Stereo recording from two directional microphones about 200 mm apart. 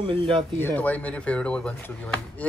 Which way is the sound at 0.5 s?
10° left (ahead or behind).